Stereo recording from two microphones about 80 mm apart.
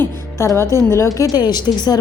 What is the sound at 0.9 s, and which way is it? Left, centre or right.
Speech, left.